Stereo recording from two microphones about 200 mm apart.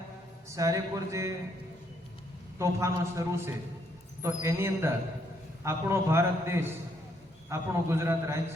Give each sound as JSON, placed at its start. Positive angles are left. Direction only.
{"t": 0.5, "sound": "a man's voice", "side_deg": -15}
{"t": 2.6, "sound": "a man's voice", "side_deg": -15}